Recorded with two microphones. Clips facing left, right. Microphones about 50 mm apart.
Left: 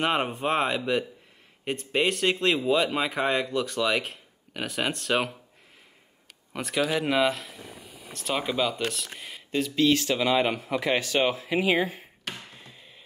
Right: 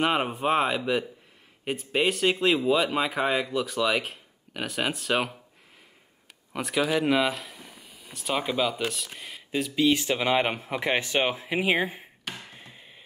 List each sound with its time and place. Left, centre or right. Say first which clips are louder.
0.0 s speech: right 1 dB; centre
6.5 s speech: right 1 dB; centre
10.0 s speech: left 1 dB; right
12.5 s music: right 1 dB; centre